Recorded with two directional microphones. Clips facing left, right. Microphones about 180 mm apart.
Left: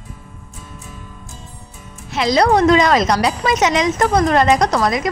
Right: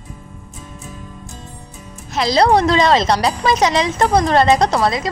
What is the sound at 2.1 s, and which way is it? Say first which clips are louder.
Speech: even; 35° right (ahead or behind).